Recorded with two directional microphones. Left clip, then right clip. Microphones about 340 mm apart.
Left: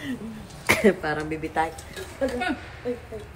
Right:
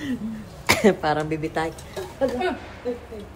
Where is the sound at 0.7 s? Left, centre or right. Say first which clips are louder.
Right 2 dB; centre.